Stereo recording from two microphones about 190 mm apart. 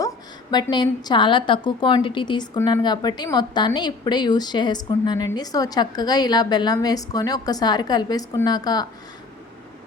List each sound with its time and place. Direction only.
0.5 s a woman's voice: 20° left (ahead or behind)